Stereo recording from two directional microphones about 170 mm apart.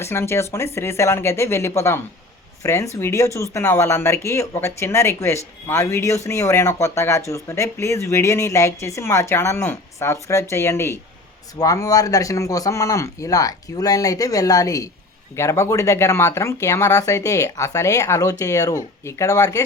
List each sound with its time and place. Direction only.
0.0 s speech: 15° left (ahead or behind)